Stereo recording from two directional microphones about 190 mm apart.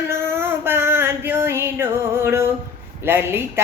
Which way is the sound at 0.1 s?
10° right (ahead or behind).